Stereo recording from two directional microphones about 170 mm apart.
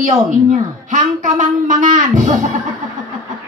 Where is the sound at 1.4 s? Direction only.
50° right (ahead or behind).